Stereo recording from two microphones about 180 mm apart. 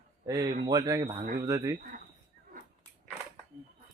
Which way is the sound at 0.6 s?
20° right (ahead or behind).